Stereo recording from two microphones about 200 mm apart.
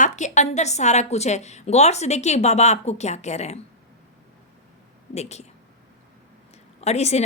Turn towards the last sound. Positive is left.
turn(degrees=30)  # may be behind; listen again after turning